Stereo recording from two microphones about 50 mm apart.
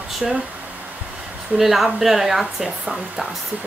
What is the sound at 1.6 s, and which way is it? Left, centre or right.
Speech, centre.